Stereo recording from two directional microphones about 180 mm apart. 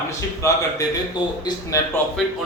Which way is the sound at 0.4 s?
15° left (ahead or behind).